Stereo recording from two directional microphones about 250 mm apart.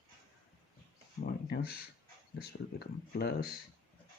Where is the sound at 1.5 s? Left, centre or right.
Left.